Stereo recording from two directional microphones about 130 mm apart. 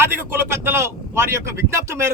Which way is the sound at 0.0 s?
20° right (ahead or behind).